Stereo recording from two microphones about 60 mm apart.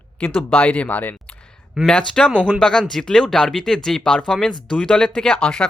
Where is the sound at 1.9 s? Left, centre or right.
Centre.